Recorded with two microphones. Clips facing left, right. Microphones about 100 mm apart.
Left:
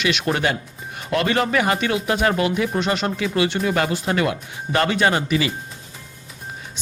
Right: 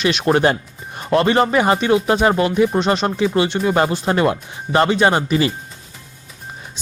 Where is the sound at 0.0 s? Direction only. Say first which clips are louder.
Right 6 dB; 35° right (ahead or behind).